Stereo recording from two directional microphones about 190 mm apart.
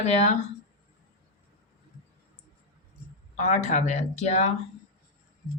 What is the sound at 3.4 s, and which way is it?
Speech, 40° left (ahead or behind).